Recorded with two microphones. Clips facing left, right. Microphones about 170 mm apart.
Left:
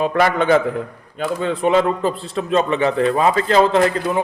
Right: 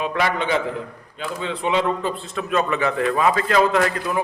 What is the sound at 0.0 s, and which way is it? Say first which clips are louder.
A man's voice: left 6 dB; 45° left (ahead or behind).